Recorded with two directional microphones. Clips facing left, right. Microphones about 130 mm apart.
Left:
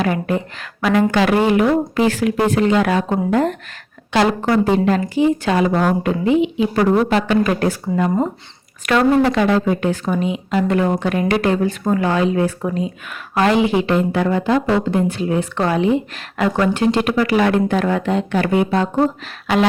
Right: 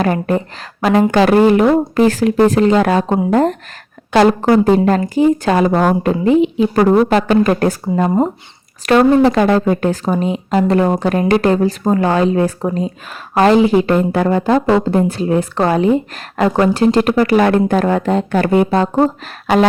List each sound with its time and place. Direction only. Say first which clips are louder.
0.0 s speech: right 3 dB; 40° right (ahead or behind)